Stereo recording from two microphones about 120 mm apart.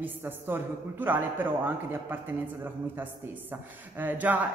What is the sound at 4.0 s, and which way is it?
Speech, 15° right (ahead or behind).